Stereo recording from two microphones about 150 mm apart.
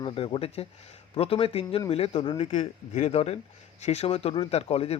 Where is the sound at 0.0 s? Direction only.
35° left (ahead or behind).